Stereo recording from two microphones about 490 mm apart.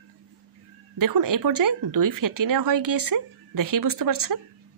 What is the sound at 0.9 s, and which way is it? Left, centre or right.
Speech, right.